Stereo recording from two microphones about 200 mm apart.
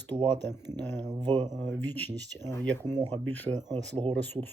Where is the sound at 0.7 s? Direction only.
60° right (ahead or behind).